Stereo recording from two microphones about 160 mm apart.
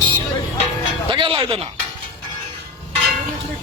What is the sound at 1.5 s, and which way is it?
Speech, 35° right (ahead or behind).